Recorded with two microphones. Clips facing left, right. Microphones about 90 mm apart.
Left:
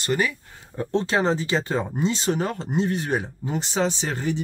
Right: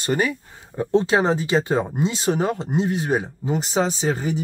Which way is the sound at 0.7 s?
15° right (ahead or behind).